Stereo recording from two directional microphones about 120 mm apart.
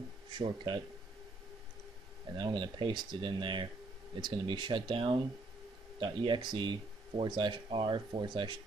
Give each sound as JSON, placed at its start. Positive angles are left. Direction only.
{"t": 0.3, "sound": "speech", "side_deg": -40}
{"t": 2.3, "sound": "speech", "side_deg": -40}